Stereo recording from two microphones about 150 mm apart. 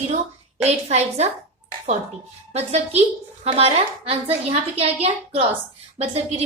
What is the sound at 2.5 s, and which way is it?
A woman's voice, 45° right (ahead or behind).